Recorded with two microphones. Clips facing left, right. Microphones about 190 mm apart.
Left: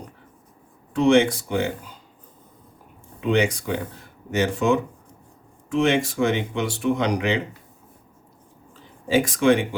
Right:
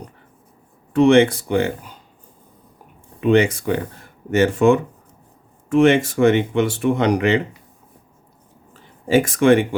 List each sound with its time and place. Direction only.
0.9 s speech: 60° right (ahead or behind)
3.2 s speech: 55° right (ahead or behind)
9.0 s speech: 55° right (ahead or behind)